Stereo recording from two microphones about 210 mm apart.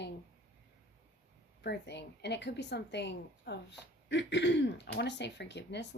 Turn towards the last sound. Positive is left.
turn(degrees=55)  # may be behind; listen again after turning